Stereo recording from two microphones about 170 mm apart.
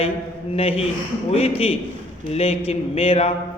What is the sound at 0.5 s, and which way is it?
A man's voice, 35° left (ahead or behind).